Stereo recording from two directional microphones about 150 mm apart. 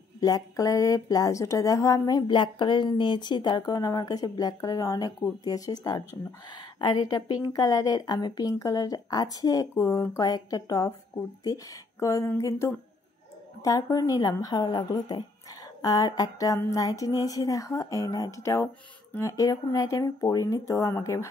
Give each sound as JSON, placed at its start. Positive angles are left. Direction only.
{"t": 0.2, "sound": "speech", "side_deg": 25}